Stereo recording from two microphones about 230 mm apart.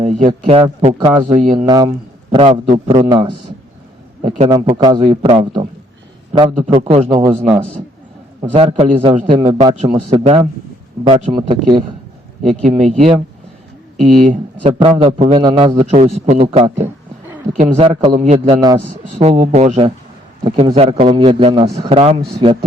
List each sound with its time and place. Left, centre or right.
0.0 s a man's voice: right
1.6 s speech: centre
2.3 s a man's voice: right
6.7 s a man's voice: right
9.6 s a man's voice: right